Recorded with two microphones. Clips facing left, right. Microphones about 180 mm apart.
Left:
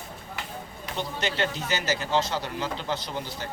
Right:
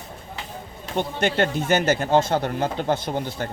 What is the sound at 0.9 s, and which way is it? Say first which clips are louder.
A man's voice: right 8 dB; 55° right (ahead or behind).